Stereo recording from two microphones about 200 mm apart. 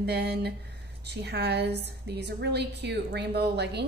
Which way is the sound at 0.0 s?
55° right (ahead or behind).